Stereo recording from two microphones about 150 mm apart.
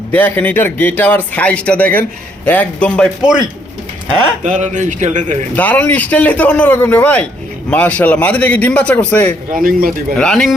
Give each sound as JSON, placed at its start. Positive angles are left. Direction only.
{"t": 0.1, "sound": "speech", "side_deg": 15}
{"t": 4.4, "sound": "a man's voice", "side_deg": -55}
{"t": 5.5, "sound": "speech", "side_deg": 10}
{"t": 9.6, "sound": "a man's voice", "side_deg": -75}
{"t": 10.2, "sound": "a man's voice", "side_deg": 5}